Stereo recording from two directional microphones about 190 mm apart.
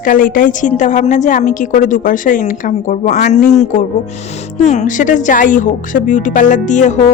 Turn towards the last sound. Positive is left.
turn(degrees=40)  # may be behind; listen again after turning